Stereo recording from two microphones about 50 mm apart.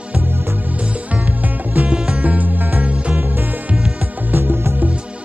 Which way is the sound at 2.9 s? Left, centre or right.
Right.